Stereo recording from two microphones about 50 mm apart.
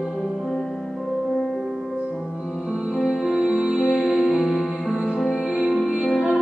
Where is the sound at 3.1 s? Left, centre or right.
Centre.